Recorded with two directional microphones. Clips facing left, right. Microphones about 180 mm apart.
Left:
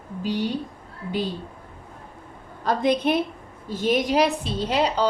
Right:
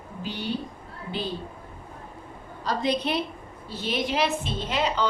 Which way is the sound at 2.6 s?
50° left (ahead or behind).